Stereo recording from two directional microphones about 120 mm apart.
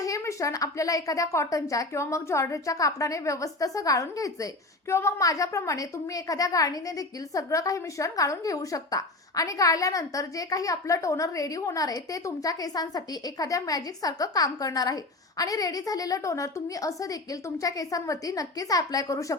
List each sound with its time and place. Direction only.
0.0 s a woman's voice: 25° left (ahead or behind)